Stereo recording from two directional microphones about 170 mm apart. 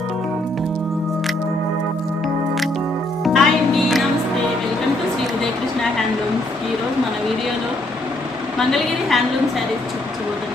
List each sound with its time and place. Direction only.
3.3 s music: centre (ahead or behind)
8.5 s a woman's voice: centre (ahead or behind)